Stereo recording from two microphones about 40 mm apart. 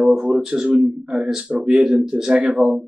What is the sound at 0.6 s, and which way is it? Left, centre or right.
A man's voice, right.